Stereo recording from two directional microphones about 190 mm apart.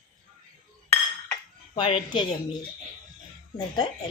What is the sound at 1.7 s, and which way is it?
Speech, 25° left (ahead or behind).